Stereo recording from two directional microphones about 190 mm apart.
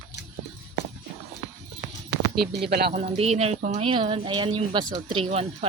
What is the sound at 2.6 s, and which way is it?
Speech, 55° right (ahead or behind).